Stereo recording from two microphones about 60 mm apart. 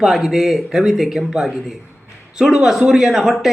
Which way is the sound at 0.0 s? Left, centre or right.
Centre.